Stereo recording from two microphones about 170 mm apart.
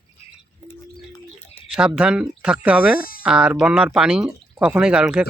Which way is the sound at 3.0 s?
60° left (ahead or behind).